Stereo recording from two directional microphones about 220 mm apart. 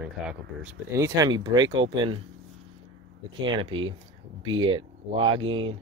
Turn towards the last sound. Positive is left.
turn(degrees=-25)  # may be behind; listen again after turning